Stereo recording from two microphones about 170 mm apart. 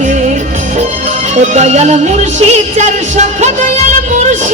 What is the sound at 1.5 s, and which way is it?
Music, 40° right (ahead or behind).